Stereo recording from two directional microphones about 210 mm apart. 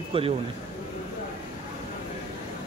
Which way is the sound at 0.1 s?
25° right (ahead or behind).